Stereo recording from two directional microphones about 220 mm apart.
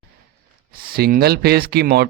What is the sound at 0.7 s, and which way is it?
Speech, 45° right (ahead or behind).